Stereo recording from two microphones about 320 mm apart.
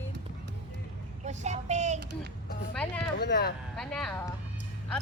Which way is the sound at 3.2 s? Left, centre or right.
Left.